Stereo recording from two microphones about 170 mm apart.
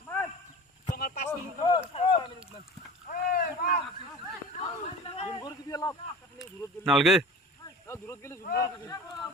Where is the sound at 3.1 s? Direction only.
60° left (ahead or behind).